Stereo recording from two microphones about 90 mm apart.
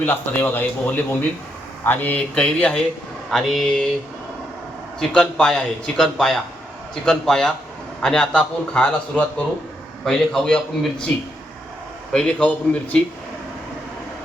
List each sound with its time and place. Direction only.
0.0 s a man's voice: 25° left (ahead or behind); by 3.8 s 5° left (ahead or behind)
4.9 s a man's voice: 5° left (ahead or behind)
12.1 s a man's voice: 10° left (ahead or behind)